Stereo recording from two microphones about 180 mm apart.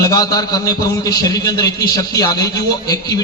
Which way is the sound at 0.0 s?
20° left (ahead or behind).